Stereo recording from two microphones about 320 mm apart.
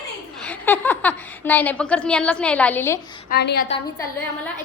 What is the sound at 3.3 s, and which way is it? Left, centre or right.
Speech, left.